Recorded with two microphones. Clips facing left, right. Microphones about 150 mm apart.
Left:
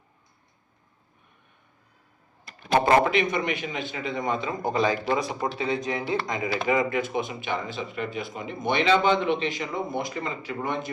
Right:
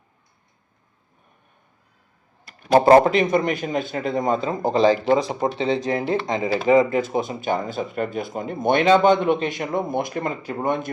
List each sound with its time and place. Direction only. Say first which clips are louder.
2.7 s a man's voice: right 7 dB; 35° right (ahead or behind)